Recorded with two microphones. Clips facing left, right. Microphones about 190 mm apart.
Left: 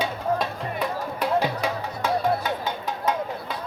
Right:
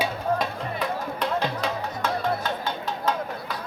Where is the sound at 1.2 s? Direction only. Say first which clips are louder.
Left 4 dB; 10° left (ahead or behind).